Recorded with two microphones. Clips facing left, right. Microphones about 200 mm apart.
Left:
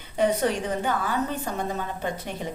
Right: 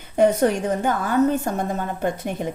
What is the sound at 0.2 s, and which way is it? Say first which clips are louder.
Speech: right 6 dB; 45° right (ahead or behind).